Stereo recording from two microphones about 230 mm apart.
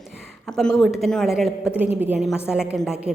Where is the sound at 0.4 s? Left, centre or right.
Centre.